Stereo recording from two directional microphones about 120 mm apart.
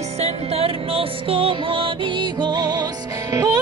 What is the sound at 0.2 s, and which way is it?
Music, 55° right (ahead or behind).